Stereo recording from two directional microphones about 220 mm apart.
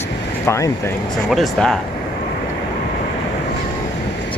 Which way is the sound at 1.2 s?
Centre (ahead or behind).